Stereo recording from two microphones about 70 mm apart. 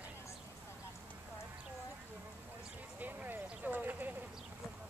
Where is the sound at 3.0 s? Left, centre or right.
Right.